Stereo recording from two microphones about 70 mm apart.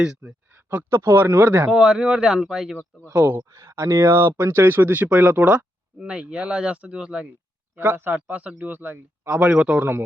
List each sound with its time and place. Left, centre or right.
0.2 s a sound: right
0.9 s speech: right
1.7 s speech: centre
3.1 s speech: right; by 7.3 s centre
7.8 s speech: right